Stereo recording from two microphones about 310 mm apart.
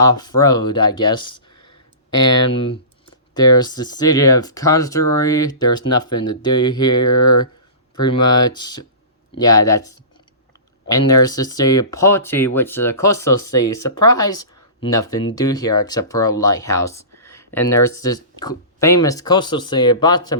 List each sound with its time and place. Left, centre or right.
0.1 s speech: centre
0.9 s speech: left
1.6 s a sound: centre
3.3 s speech: centre
10.9 s speech: centre
13.2 s speech: left
14.2 s speech: centre
17.8 s speech: left
18.1 s speech: centre